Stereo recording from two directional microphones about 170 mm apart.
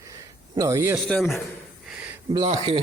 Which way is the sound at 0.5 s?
20° right (ahead or behind).